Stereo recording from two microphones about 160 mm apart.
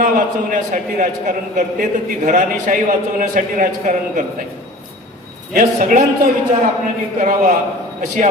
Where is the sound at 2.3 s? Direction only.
50° right (ahead or behind).